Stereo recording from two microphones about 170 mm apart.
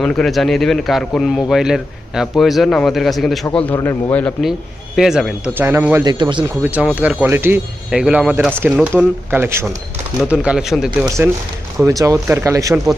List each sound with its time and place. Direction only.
0.0 s a man's voice: 5° left (ahead or behind)
4.9 s speech: centre (ahead or behind)
6.1 s speech: 25° right (ahead or behind)
6.6 s a man's voice: 10° right (ahead or behind)
8.6 s a man's voice: 15° right (ahead or behind)
11.9 s speech: 20° right (ahead or behind)